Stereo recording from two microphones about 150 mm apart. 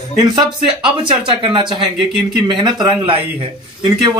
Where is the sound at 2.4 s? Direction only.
30° right (ahead or behind).